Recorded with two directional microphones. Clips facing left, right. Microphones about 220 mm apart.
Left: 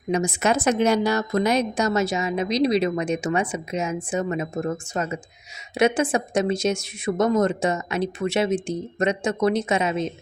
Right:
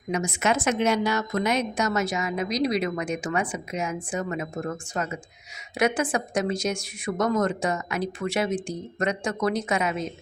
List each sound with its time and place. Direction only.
0.1 s a woman's voice: 30° left (ahead or behind)